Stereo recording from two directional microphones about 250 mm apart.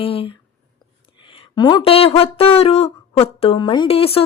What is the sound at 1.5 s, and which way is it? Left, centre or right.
Speech, centre.